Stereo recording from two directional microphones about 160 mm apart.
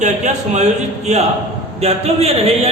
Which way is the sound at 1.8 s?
40° right (ahead or behind).